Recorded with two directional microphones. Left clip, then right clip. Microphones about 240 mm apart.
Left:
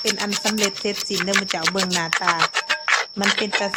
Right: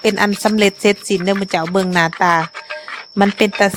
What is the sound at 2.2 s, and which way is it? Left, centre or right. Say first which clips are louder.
Speech: right 8 dB; right.